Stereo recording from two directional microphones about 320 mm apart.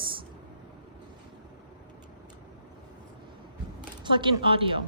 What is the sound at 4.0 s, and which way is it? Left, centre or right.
Speech, centre.